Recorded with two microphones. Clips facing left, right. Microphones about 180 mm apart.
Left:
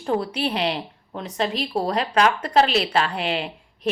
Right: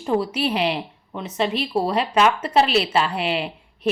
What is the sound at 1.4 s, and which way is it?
Speech, 40° left (ahead or behind).